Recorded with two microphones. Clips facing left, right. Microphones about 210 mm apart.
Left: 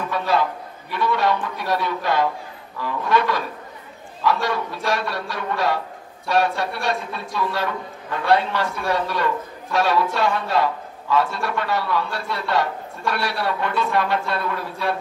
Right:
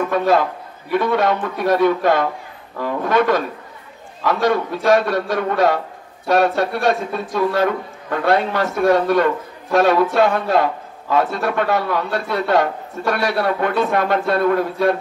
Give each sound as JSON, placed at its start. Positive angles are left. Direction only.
{"t": 0.9, "sound": "a man's voice", "side_deg": -50}